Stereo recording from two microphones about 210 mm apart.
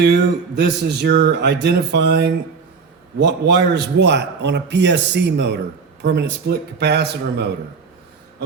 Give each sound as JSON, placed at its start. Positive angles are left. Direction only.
{"t": 0.0, "sound": "a man's voice", "side_deg": -50}